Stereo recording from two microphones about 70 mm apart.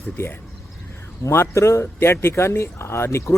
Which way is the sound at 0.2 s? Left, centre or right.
Left.